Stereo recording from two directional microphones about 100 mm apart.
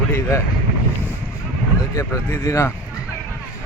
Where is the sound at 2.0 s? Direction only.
30° left (ahead or behind).